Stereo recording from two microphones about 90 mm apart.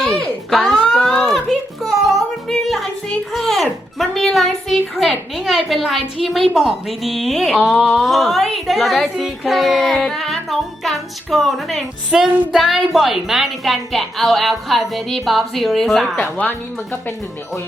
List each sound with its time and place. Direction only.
0.0 s a sound: 5° left (ahead or behind)
1.8 s music: centre (ahead or behind)
5.3 s speech: centre (ahead or behind)
12.3 s child singing: 15° right (ahead or behind)
12.5 s speech: 5° right (ahead or behind)
16.4 s speech: 20° left (ahead or behind)